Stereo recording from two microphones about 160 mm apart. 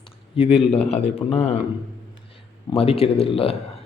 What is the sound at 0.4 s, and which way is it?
A man's voice, 35° left (ahead or behind).